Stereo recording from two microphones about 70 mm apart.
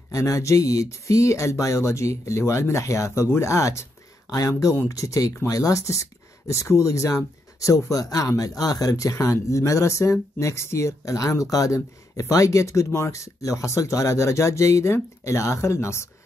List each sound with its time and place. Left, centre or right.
0.1 s speech: left
3.5 s speech: left